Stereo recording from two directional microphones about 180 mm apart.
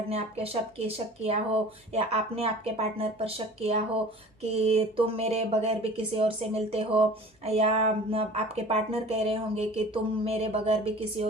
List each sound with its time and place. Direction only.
0.1 s speech: 35° right (ahead or behind)